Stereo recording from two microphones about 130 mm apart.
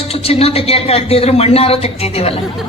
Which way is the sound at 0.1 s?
50° left (ahead or behind).